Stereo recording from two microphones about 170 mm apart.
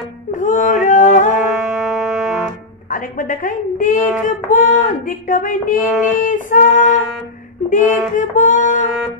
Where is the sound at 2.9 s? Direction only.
50° left (ahead or behind).